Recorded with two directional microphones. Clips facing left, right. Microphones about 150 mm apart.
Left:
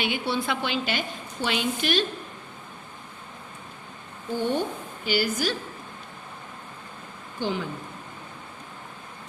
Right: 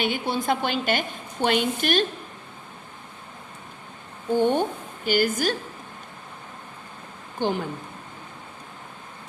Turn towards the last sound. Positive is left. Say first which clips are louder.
# right 3 dB
turn(degrees=-50)  # may be behind; listen again after turning